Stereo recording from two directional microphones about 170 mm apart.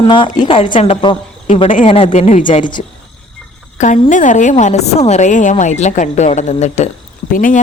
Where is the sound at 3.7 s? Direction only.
45° left (ahead or behind).